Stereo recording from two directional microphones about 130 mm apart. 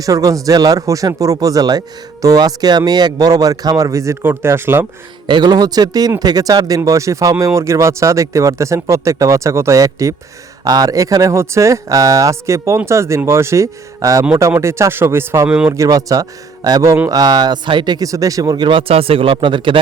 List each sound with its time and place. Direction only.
0.0 s speech: 25° right (ahead or behind)
5.2 s speech: 35° right (ahead or behind); by 15.4 s 20° right (ahead or behind)
15.4 s speech: 10° right (ahead or behind)
15.7 s speech: 25° right (ahead or behind)